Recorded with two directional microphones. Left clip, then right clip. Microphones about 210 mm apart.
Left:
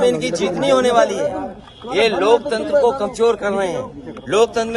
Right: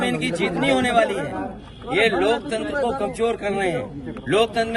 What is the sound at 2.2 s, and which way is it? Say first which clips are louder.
Speech: left 6 dB; 50° left (ahead or behind).